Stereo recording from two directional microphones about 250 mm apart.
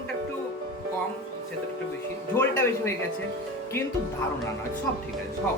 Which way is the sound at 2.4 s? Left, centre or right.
Centre.